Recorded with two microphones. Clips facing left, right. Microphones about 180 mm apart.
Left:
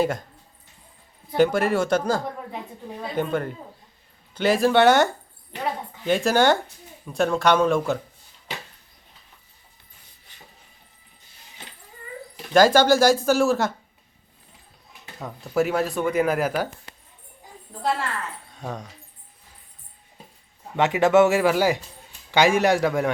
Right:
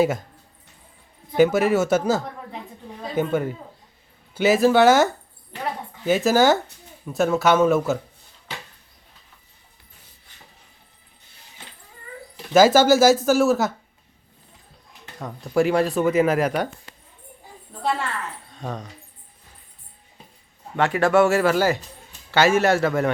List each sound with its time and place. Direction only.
1.4 s speech: 5° right (ahead or behind)
6.1 s speech: 5° right (ahead or behind)
12.5 s speech: 5° right (ahead or behind)
15.2 s speech: 5° left (ahead or behind)
18.5 s speech: 10° left (ahead or behind)
20.7 s a man's voice: 20° left (ahead or behind)